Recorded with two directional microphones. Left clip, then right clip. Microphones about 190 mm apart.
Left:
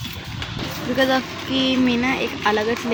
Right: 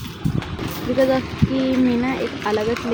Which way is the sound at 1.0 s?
5° right (ahead or behind).